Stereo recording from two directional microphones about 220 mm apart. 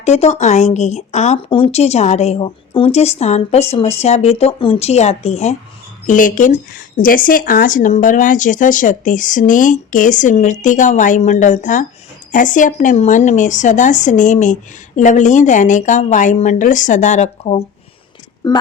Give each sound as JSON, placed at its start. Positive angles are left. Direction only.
{"t": 0.0, "sound": "a woman's voice", "side_deg": 30}
{"t": 18.4, "sound": "a woman's voice", "side_deg": 15}